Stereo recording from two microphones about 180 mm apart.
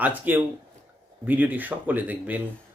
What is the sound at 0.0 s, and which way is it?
Speech, 10° right (ahead or behind).